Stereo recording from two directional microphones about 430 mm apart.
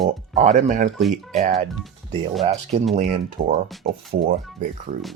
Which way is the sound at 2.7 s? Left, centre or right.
Centre.